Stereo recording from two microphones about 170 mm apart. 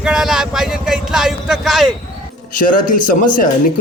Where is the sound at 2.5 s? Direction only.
55° left (ahead or behind).